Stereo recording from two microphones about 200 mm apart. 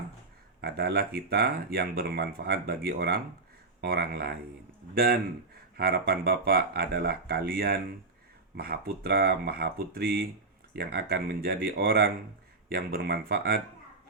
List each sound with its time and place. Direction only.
0.6 s speech: 55° right (ahead or behind)
5.7 s speech: 50° right (ahead or behind)